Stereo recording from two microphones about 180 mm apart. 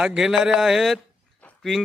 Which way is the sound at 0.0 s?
5° right (ahead or behind).